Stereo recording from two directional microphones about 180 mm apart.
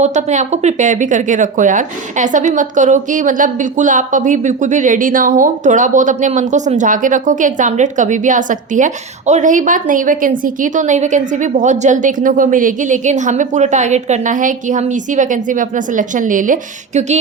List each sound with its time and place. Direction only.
0.0 s speech: 40° right (ahead or behind)